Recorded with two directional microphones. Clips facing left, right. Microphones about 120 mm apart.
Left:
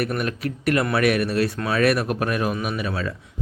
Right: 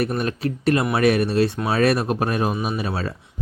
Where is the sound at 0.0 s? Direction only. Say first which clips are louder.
Right 2 dB; 30° right (ahead or behind).